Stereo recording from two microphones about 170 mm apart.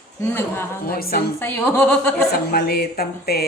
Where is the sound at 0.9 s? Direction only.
60° left (ahead or behind).